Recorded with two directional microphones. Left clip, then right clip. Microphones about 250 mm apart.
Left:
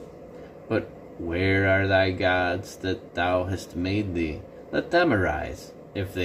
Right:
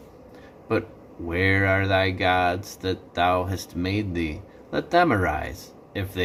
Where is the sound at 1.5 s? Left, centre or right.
Centre.